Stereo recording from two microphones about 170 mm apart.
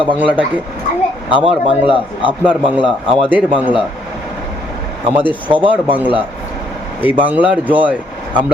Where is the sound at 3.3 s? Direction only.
10° right (ahead or behind).